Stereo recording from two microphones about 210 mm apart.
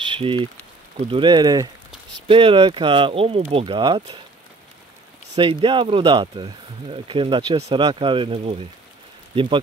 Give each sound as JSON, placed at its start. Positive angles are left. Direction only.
{"t": 0.0, "sound": "rain on surface", "side_deg": -25}
{"t": 1.0, "sound": "speech", "side_deg": -25}
{"t": 5.3, "sound": "speech", "side_deg": -25}